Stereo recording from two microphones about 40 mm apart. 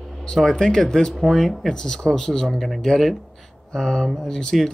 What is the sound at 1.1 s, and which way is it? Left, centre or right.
Speech, centre.